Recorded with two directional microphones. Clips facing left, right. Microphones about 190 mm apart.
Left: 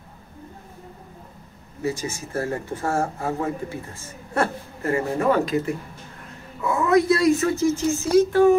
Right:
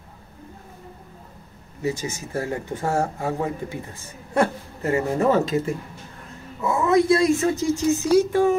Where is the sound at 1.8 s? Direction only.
20° right (ahead or behind).